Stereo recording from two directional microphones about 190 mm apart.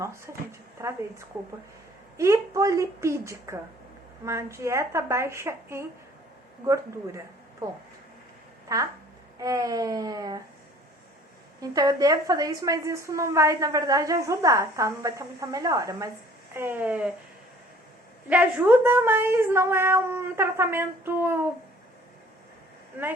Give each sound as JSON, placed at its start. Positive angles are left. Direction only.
{"t": 0.8, "sound": "a woman's voice", "side_deg": -20}
{"t": 2.1, "sound": "a woman's voice", "side_deg": -15}
{"t": 8.7, "sound": "a woman's voice", "side_deg": -20}
{"t": 11.6, "sound": "a woman's voice", "side_deg": -20}
{"t": 18.3, "sound": "a woman's voice", "side_deg": -10}